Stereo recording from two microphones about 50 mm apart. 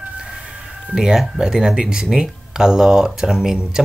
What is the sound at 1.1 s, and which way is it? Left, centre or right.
Speech, centre.